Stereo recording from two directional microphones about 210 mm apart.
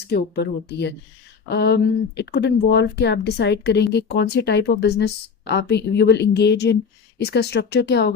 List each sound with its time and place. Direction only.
0.1 s speech: 50° left (ahead or behind)